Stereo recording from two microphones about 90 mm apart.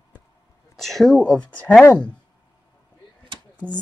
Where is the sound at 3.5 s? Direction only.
15° left (ahead or behind).